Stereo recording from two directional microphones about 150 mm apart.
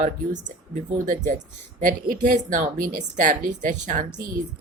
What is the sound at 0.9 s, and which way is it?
Speech, 60° right (ahead or behind).